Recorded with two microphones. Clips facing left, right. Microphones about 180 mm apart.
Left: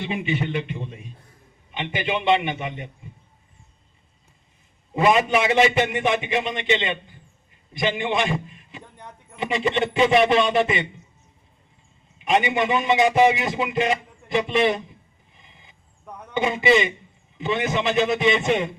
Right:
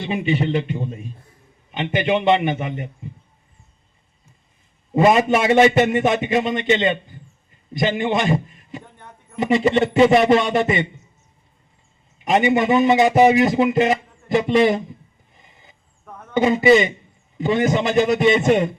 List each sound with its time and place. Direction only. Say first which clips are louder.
0.0 s a man's voice: right 5 dB; 35° right (ahead or behind)
4.9 s a man's voice: right 4 dB; 40° right (ahead or behind)
7.9 s a man's voice: right 4 dB; 40° right (ahead or behind)
12.2 s a man's voice: right 4 dB; 40° right (ahead or behind)
16.0 s a sound: even; 15° left (ahead or behind)
16.3 s a man's voice: right 6 dB; 45° right (ahead or behind)